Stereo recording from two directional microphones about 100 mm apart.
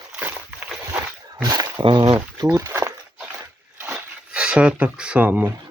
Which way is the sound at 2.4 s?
35° right (ahead or behind).